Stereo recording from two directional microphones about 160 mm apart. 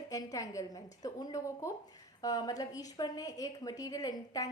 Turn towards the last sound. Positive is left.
turn(degrees=20)  # may be behind; listen again after turning